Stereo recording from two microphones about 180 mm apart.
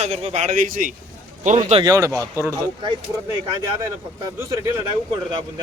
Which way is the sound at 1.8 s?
20° right (ahead or behind).